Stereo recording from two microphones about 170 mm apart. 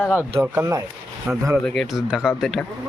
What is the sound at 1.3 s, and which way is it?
Speech, 5° right (ahead or behind).